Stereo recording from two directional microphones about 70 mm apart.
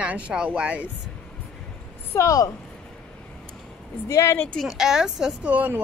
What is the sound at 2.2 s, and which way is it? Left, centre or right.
Speech, left.